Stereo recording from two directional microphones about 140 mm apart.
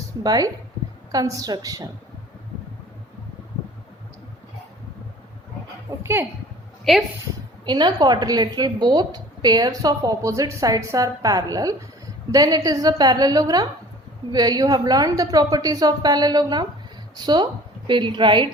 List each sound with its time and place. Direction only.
0.2 s a woman's voice: 25° right (ahead or behind)
6.0 s a woman's voice: 15° right (ahead or behind)
6.9 s speech: centre (ahead or behind)
7.6 s a woman's voice: 35° right (ahead or behind)